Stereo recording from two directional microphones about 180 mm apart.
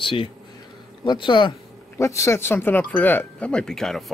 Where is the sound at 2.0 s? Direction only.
15° left (ahead or behind).